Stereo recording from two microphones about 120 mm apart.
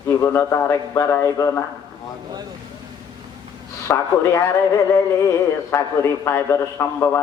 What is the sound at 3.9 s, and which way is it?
Speech, 20° left (ahead or behind).